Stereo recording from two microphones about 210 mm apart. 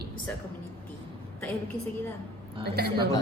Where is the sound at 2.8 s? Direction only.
50° right (ahead or behind).